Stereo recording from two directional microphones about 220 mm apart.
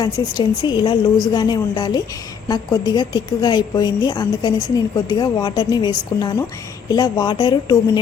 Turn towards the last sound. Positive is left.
turn(degrees=20)  # may be behind; listen again after turning